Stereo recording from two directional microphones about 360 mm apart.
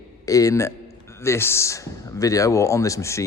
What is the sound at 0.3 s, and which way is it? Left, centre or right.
Speech, centre.